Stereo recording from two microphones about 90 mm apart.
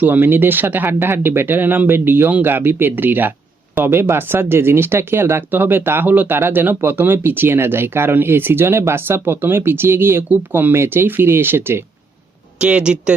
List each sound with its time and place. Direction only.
0.0 s speech: 20° right (ahead or behind)
12.5 s speech: 15° right (ahead or behind)